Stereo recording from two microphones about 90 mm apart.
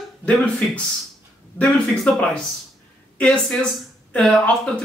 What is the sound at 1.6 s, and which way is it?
Speech, 10° left (ahead or behind).